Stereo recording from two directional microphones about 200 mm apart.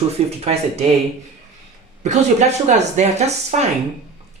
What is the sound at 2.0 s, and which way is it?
Speech, 35° right (ahead or behind).